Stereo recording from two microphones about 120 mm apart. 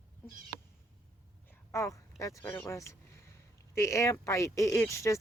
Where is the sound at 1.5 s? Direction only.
25° left (ahead or behind).